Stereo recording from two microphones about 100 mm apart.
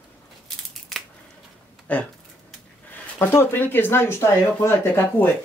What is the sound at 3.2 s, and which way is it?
Speech, 20° left (ahead or behind).